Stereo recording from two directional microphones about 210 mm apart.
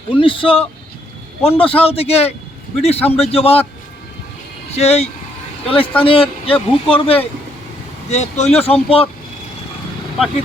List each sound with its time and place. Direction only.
0.1 s speech: 25° left (ahead or behind)
4.7 s speech: 30° left (ahead or behind)